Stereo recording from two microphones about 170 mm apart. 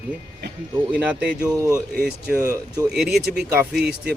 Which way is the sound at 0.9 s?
5° right (ahead or behind).